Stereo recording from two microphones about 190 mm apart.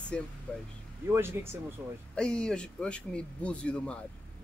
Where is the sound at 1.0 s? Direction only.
10° right (ahead or behind).